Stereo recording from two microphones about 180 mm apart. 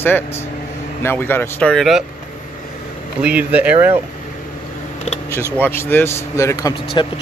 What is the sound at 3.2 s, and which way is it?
Speech, 5° right (ahead or behind).